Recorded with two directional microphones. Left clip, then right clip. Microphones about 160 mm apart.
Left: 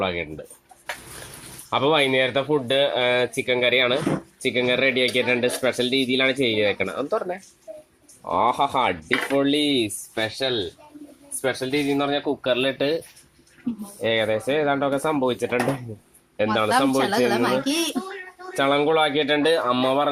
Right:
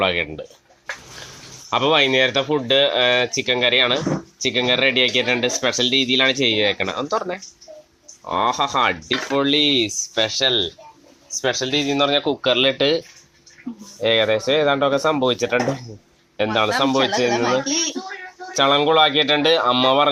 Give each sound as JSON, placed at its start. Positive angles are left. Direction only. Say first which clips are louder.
{"t": 0.0, "sound": "speech", "louder": "right 6 dB", "side_deg": -5}
{"t": 1.7, "sound": "speech", "louder": "right 3 dB", "side_deg": 0}
{"t": 9.0, "sound": "speech", "louder": "even", "side_deg": -30}
{"t": 9.3, "sound": "speech", "louder": "right 5 dB", "side_deg": 0}
{"t": 14.0, "sound": "speech", "louder": "right 5 dB", "side_deg": 0}
{"t": 17.1, "sound": "speech", "louder": "right 1 dB", "side_deg": 75}
{"t": 18.5, "sound": "speech", "louder": "right 4 dB", "side_deg": 0}